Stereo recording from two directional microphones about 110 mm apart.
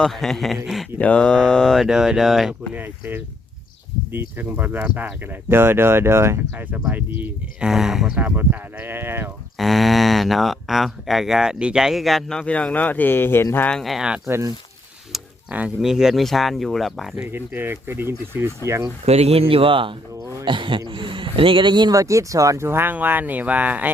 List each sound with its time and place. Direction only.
0.0 s speech: centre (ahead or behind)
0.9 s speech: 10° left (ahead or behind)
2.7 s speech: 15° right (ahead or behind)
7.7 s speech: 5° right (ahead or behind)
8.2 s speech: 15° right (ahead or behind)
9.6 s speech: centre (ahead or behind); by 13.7 s 20° left (ahead or behind)
13.7 s speech: 5° left (ahead or behind)
14.3 s speech: 25° right (ahead or behind)
15.1 s speech: 10° right (ahead or behind)
17.2 s speech: 20° right (ahead or behind)
19.0 s speech: 70° right (ahead or behind); by 23.9 s 15° right (ahead or behind)